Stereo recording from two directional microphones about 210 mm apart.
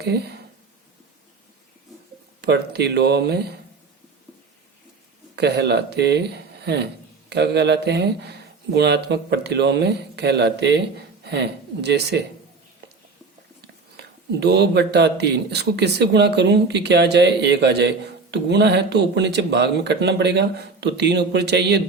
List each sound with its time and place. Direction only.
0.0 s speech: 50° right (ahead or behind)
2.4 s speech: 50° right (ahead or behind)
5.4 s speech: 50° right (ahead or behind)
13.9 s speech: 50° right (ahead or behind)